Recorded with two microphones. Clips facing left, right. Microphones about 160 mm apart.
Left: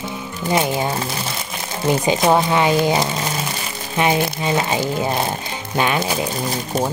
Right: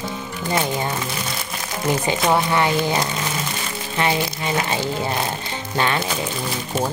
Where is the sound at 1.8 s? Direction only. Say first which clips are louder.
Left 4 dB; 20° left (ahead or behind).